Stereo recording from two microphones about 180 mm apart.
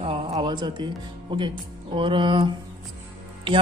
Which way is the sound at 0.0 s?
30° right (ahead or behind).